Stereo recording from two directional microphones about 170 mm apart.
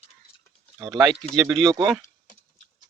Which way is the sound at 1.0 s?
Centre (ahead or behind).